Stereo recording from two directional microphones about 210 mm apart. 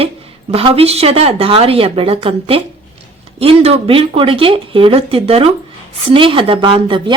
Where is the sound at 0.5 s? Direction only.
25° right (ahead or behind).